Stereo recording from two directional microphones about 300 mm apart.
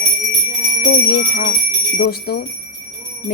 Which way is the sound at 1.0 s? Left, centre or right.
Left.